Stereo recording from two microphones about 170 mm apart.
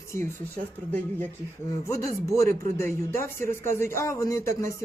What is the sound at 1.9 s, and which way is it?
Speech, 20° left (ahead or behind).